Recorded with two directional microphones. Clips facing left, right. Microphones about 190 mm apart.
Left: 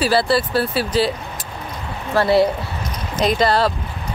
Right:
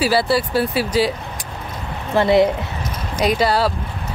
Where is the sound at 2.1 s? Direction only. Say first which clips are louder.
Right 1 dB; 20° right (ahead or behind).